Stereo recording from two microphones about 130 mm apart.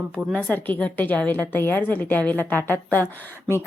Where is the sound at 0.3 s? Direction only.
10° left (ahead or behind).